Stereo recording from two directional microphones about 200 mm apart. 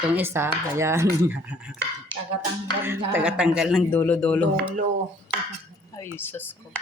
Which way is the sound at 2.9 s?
10° right (ahead or behind).